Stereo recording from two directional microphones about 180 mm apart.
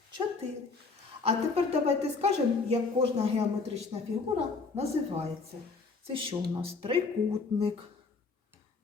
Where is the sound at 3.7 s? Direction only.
35° right (ahead or behind).